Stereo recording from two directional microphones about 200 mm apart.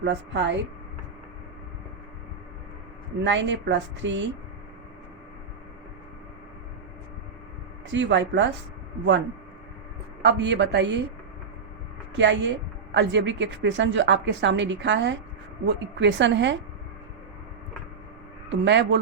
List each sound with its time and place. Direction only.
0.0 s a woman's voice: 60° right (ahead or behind)
3.2 s a woman's voice: 65° right (ahead or behind)
7.9 s a woman's voice: 65° right (ahead or behind)
10.2 s a woman's voice: 60° right (ahead or behind)
12.1 s a woman's voice: 65° right (ahead or behind)
18.4 s a woman's voice: 60° right (ahead or behind)